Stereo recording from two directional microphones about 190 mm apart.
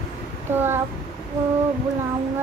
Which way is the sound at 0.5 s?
10° right (ahead or behind).